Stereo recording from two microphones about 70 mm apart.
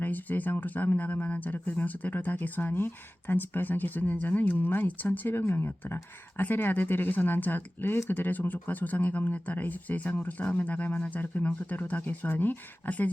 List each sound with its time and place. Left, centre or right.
0.0 s speech: left